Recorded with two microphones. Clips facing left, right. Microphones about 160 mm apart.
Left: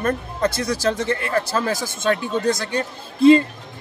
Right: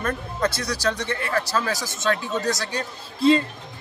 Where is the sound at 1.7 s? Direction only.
55° left (ahead or behind).